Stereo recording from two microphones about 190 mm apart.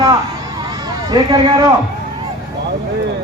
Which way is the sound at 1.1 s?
20° right (ahead or behind).